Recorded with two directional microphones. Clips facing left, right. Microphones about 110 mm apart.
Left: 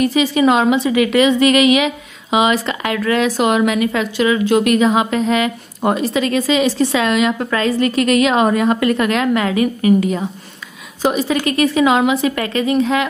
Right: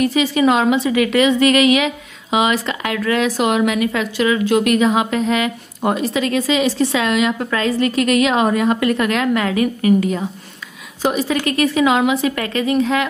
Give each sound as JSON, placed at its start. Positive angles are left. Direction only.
{"t": 0.0, "sound": "a woman's voice", "side_deg": 20}